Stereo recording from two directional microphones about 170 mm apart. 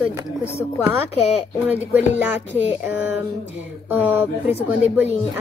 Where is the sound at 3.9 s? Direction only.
10° right (ahead or behind).